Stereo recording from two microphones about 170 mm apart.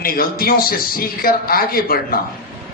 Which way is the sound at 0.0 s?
60° left (ahead or behind).